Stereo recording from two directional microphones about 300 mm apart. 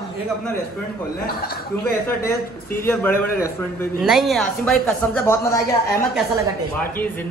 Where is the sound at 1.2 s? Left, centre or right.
Left.